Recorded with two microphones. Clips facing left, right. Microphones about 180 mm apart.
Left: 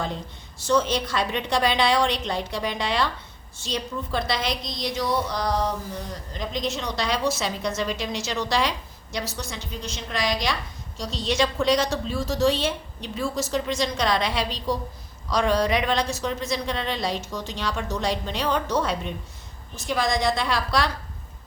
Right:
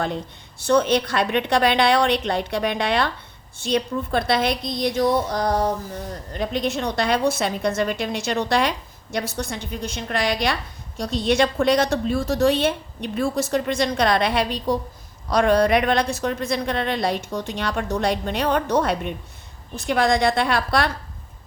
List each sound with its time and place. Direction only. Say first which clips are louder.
0.6 s a woman's voice: right 4 dB; 60° right (ahead or behind)
6.3 s a woman's voice: right 5 dB; 60° right (ahead or behind)